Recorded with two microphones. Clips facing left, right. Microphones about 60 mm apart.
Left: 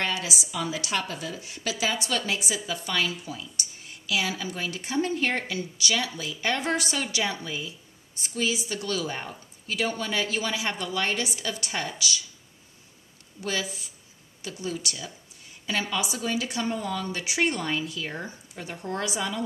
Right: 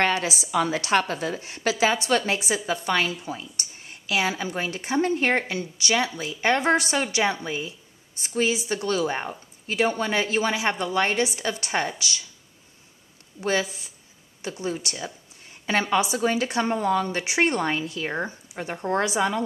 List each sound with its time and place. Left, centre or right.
0.0 s a woman's voice: right
13.4 s a woman's voice: right